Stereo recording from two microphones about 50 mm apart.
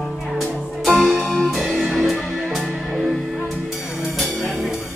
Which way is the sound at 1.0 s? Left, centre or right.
Centre.